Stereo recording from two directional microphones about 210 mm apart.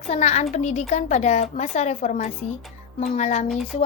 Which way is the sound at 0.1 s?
30° left (ahead or behind).